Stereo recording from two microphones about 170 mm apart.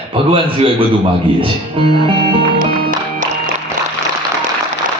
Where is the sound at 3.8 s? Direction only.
50° right (ahead or behind).